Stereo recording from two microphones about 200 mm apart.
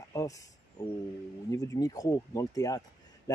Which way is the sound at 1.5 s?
15° left (ahead or behind).